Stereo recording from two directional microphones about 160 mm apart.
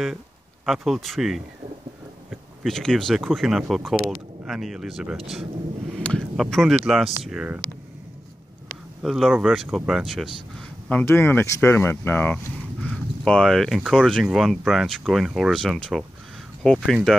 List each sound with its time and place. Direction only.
0.7 s speech: centre (ahead or behind)
2.6 s speech: 5° left (ahead or behind)
9.0 s speech: centre (ahead or behind)